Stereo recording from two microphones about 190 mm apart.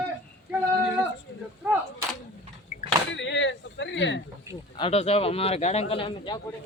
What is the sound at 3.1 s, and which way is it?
Speech, 75° left (ahead or behind).